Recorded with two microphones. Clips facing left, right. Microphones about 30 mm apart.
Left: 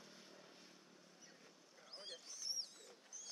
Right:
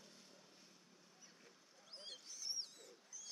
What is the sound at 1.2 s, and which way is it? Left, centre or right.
Owl, centre.